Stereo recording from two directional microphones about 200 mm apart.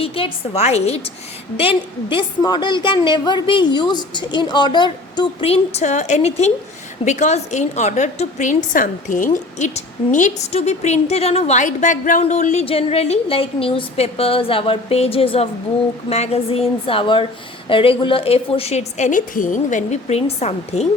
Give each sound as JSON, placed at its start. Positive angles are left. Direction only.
{"t": 0.0, "sound": "a woman's voice", "side_deg": 30}